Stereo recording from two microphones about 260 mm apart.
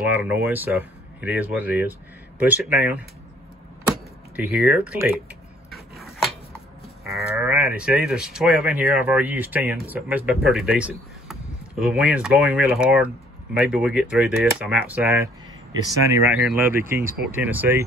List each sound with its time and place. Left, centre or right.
0.0 s speech: centre
3.8 s power windows: centre
7.1 s speech: centre
17.0 s speech: right
17.3 s speech: centre